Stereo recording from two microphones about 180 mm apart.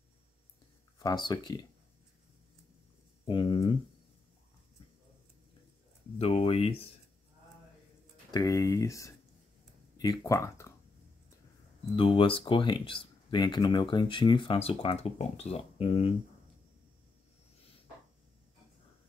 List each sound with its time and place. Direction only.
0.9 s speech: 20° left (ahead or behind)
3.3 s speech: 30° left (ahead or behind)
6.1 s speech: 30° left (ahead or behind)
8.3 s speech: 20° left (ahead or behind)
11.9 s speech: 30° left (ahead or behind)